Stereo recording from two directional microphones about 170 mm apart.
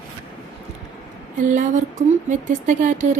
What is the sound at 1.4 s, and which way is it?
A woman's voice, 45° right (ahead or behind).